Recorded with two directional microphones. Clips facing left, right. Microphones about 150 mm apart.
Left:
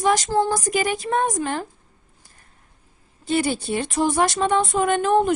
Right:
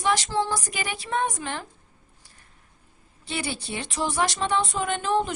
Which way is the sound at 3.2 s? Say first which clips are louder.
Left 10 dB; 45° left (ahead or behind).